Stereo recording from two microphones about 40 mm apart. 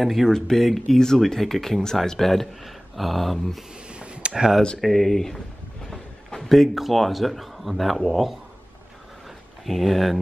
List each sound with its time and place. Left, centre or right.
0.0 s speech: centre
3.9 s a sound: right
4.7 s speech: centre
9.7 s speech: centre